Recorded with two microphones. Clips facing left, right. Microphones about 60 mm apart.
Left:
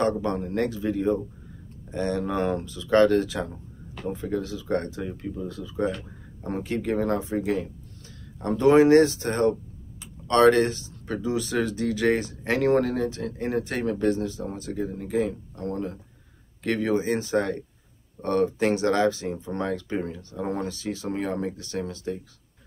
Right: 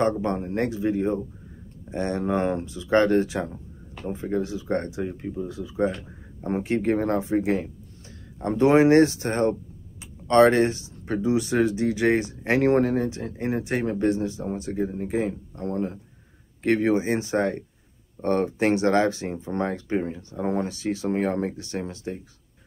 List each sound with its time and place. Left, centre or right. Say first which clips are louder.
0.2 s speech: right 1 dB; right